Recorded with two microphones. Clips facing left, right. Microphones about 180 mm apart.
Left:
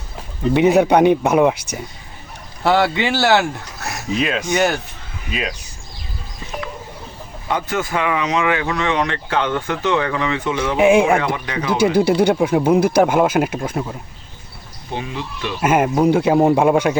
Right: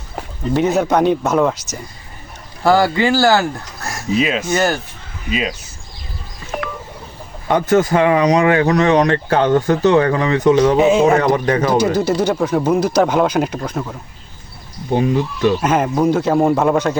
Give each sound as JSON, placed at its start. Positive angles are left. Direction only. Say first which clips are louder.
{"t": 0.5, "sound": "speech", "louder": "left 2 dB", "side_deg": 15}
{"t": 2.6, "sound": "speech", "louder": "right 3 dB", "side_deg": 0}
{"t": 7.4, "sound": "speech", "louder": "right 8 dB", "side_deg": -45}
{"t": 10.8, "sound": "speech", "louder": "even", "side_deg": 10}
{"t": 11.2, "sound": "a man's voice", "louder": "right 8 dB", "side_deg": -45}
{"t": 12.0, "sound": "speech", "louder": "left 2 dB", "side_deg": 60}
{"t": 12.3, "sound": "speech", "louder": "left 1 dB", "side_deg": 10}
{"t": 14.9, "sound": "speech", "louder": "right 10 dB", "side_deg": -45}
{"t": 15.6, "sound": "speech", "louder": "even", "side_deg": 10}